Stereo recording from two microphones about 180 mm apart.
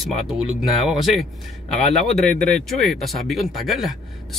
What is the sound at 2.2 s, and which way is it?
Speech, 45° left (ahead or behind).